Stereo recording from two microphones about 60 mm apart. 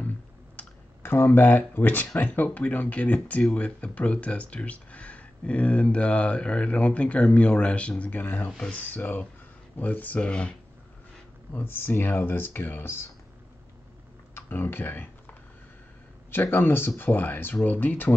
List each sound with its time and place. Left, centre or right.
1.0 s speech: left
8.5 s speech: centre
8.7 s speech: left
11.6 s speech: left
14.3 s computer keyboard: left
16.3 s speech: left